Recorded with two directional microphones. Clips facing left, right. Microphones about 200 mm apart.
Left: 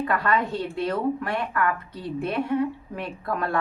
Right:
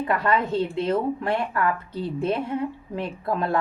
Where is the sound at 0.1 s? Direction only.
25° right (ahead or behind).